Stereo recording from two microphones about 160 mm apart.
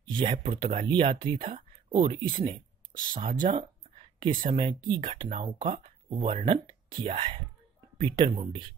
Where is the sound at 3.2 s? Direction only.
60° right (ahead or behind).